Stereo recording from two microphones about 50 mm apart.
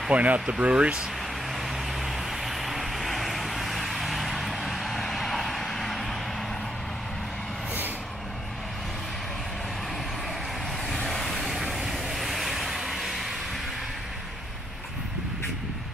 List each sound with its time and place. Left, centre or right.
0.1 s speech: right
1.5 s vehicle: centre
10.9 s vehicle: centre